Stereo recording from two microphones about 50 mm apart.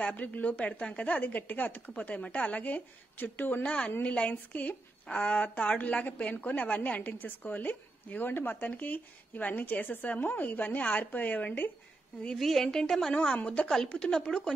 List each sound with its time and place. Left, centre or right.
0.0 s a woman's voice: left
3.6 s a woman's voice: left
12.4 s a woman's voice: centre; by 13.7 s left
13.7 s a woman's voice: centre